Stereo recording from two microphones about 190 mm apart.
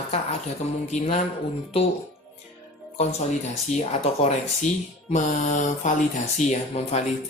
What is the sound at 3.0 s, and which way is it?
Speech, 35° left (ahead or behind).